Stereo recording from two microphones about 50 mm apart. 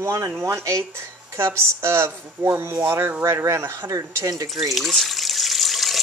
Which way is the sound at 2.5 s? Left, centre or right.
Right.